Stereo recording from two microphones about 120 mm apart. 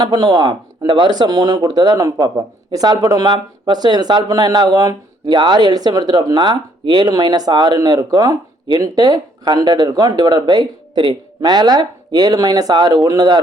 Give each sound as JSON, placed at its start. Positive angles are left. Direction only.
{"t": 0.0, "sound": "speech", "side_deg": -40}